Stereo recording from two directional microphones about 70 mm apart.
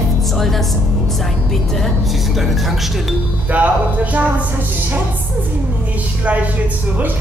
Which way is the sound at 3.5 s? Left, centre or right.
Right.